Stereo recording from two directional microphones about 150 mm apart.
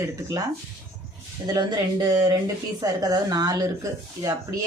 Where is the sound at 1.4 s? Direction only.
25° right (ahead or behind).